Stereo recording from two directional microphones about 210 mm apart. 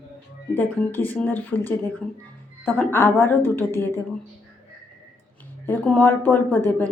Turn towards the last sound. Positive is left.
turn(degrees=10)  # may be behind; listen again after turning